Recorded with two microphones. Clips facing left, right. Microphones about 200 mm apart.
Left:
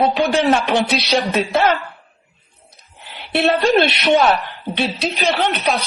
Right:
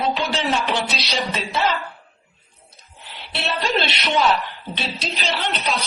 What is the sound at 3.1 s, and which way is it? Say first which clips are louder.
A woman's voice: left 11 dB; 55° left (ahead or behind).